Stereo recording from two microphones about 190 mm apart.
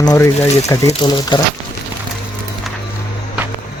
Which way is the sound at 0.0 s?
20° left (ahead or behind).